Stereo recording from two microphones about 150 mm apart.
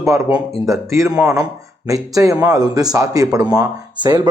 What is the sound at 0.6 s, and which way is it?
Speech, 20° right (ahead or behind).